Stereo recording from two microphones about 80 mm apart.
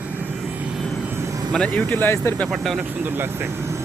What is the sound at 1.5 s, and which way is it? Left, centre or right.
Speech, centre.